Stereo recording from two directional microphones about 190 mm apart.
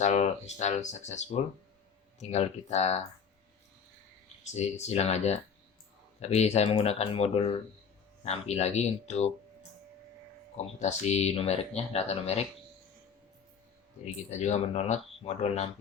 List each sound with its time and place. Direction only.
0.0 s speech: 35° left (ahead or behind)
4.5 s speech: 35° left (ahead or behind)
10.8 s speech: 35° left (ahead or behind)
14.0 s speech: 35° left (ahead or behind)